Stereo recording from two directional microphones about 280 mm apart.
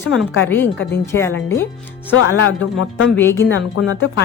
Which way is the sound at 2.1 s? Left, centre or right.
Left.